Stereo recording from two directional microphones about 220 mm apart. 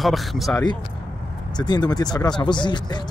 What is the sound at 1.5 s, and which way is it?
Speech, 20° left (ahead or behind).